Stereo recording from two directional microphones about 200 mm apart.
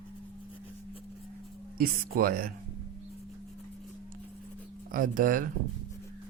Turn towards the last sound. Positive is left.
turn(degrees=-45)  # may be behind; listen again after turning